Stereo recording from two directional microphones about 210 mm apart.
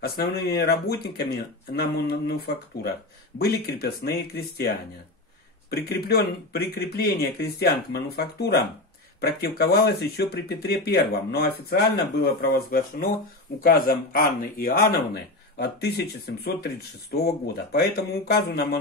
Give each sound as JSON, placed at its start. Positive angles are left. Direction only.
{"t": 0.0, "sound": "speech", "side_deg": 50}
{"t": 5.7, "sound": "speech", "side_deg": 50}